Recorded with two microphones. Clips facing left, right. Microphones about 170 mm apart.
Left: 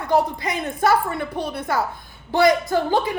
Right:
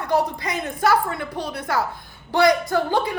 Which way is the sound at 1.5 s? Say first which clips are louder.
Right 1 dB; 25° left (ahead or behind).